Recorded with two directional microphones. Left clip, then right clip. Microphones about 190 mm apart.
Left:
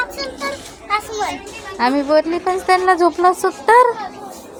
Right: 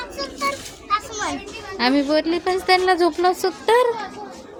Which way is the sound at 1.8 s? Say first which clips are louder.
Left 4 dB; 5° right (ahead or behind).